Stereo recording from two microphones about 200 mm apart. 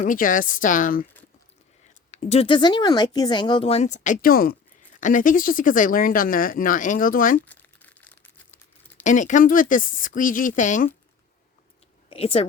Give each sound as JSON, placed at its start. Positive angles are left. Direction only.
{"t": 0.0, "sound": "speech", "side_deg": 40}
{"t": 2.0, "sound": "speech", "side_deg": 35}
{"t": 7.4, "sound": "tearing", "side_deg": 10}
{"t": 9.0, "sound": "a woman's voice", "side_deg": 40}
{"t": 12.0, "sound": "speech", "side_deg": 30}